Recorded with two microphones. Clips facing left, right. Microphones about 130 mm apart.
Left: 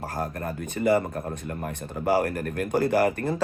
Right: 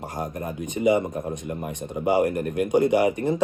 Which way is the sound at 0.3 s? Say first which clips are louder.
Right 1 dB; 15° right (ahead or behind).